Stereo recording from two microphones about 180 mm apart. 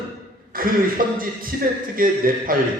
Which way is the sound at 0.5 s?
50° right (ahead or behind).